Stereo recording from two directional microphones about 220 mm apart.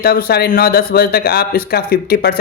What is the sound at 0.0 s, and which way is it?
A man's voice, 45° left (ahead or behind).